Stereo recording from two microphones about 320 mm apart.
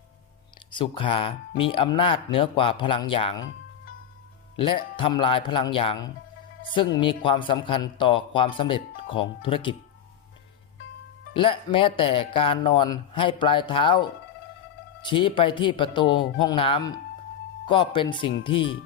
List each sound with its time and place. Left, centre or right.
0.7 s a man's voice: centre
4.5 s a man's voice: centre
11.3 s a man's voice: centre